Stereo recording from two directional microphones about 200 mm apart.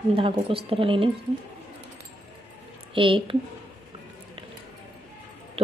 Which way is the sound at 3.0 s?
25° right (ahead or behind).